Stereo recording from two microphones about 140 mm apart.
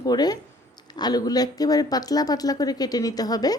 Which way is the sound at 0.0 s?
30° left (ahead or behind).